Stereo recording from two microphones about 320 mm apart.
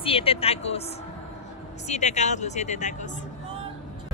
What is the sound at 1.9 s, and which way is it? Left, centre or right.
Speech, left.